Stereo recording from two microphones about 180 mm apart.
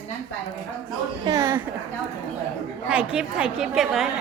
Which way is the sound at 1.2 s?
20° right (ahead or behind).